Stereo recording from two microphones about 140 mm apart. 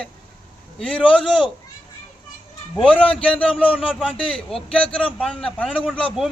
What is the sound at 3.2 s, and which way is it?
Speech, 10° left (ahead or behind).